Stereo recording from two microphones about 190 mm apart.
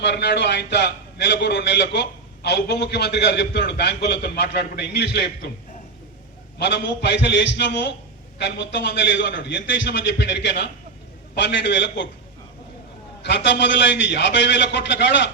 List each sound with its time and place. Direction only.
0.0 s a man's voice: 65° left (ahead or behind)
6.6 s a man's voice: 65° left (ahead or behind)
13.2 s a man's voice: 65° left (ahead or behind)